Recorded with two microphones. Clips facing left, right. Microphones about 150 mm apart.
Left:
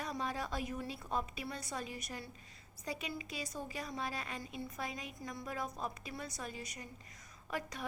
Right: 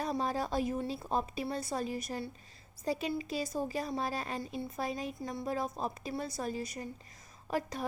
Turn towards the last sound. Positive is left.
turn(degrees=-35)  # may be behind; listen again after turning